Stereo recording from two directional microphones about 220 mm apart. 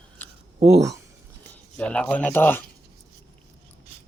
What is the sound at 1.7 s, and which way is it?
Speech, 5° left (ahead or behind).